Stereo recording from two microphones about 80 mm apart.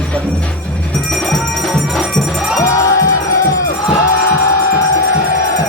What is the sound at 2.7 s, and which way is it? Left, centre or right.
Music, left.